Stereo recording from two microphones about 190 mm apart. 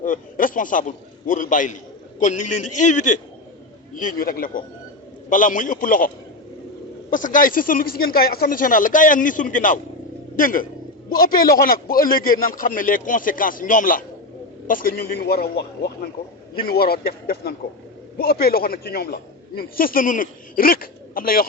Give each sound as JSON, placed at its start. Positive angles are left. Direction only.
{"t": 0.0, "sound": "a man's voice", "side_deg": 45}
{"t": 7.1, "sound": "a man's voice", "side_deg": 45}